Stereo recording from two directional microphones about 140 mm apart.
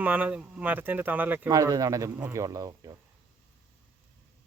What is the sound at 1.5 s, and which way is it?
A man's voice, 25° right (ahead or behind).